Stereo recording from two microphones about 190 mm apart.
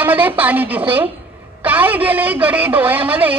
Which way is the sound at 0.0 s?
10° right (ahead or behind).